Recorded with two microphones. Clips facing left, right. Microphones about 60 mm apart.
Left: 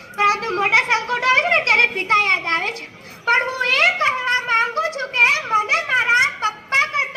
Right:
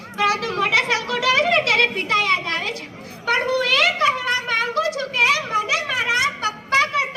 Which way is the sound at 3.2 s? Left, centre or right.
Left.